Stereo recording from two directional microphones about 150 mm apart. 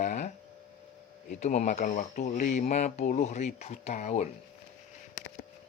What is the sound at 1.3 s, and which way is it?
Speech, 50° left (ahead or behind).